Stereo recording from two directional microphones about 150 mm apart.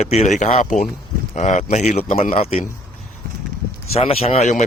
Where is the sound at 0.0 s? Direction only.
50° left (ahead or behind).